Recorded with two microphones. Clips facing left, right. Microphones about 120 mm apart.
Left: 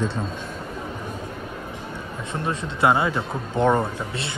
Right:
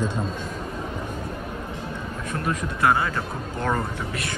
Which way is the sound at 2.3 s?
25° left (ahead or behind).